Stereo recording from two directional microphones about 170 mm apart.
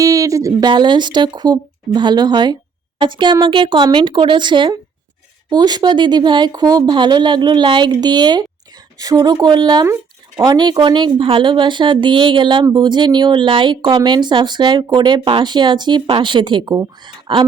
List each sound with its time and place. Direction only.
0.0 s speech: 20° right (ahead or behind)